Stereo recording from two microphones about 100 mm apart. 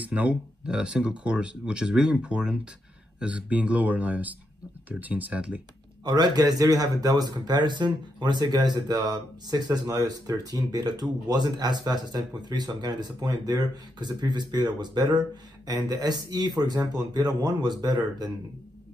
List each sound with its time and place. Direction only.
0.0 s speech: 15° right (ahead or behind)
6.0 s a man's voice: 45° right (ahead or behind)